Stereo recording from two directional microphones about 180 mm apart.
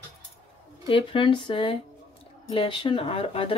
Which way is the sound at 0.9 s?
30° left (ahead or behind).